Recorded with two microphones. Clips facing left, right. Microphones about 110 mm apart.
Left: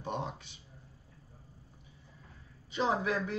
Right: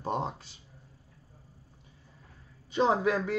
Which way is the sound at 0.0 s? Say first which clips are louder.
Right 5 dB; 40° right (ahead or behind).